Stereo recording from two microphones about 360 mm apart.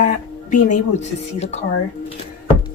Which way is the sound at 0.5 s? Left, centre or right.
Centre.